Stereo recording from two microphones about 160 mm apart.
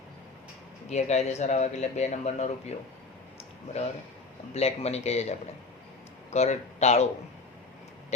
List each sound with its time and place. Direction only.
0.9 s speech: 45° left (ahead or behind)
4.5 s speech: 40° left (ahead or behind)
6.3 s speech: 45° left (ahead or behind)